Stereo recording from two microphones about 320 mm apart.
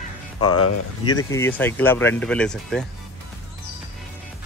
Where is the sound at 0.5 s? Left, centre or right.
Left.